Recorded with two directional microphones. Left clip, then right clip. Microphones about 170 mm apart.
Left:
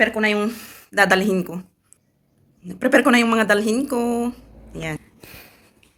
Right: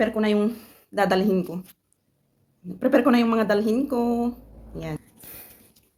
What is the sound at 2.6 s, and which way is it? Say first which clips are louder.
Speech: left 4 dB; centre (ahead or behind).